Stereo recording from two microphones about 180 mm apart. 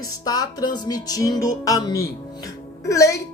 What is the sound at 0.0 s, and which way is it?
Speech, 20° left (ahead or behind).